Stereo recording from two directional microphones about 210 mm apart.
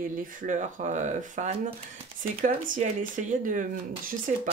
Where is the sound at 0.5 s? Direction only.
35° right (ahead or behind).